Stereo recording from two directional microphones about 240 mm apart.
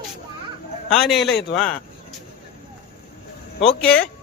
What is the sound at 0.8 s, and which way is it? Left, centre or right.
Speech, centre.